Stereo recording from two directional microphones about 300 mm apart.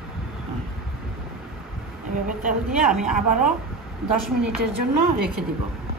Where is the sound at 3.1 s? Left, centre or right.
Right.